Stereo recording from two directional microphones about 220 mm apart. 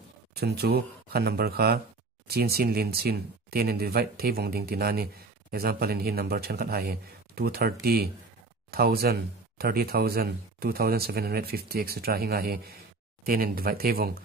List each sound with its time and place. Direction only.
0.4 s speech: 45° right (ahead or behind)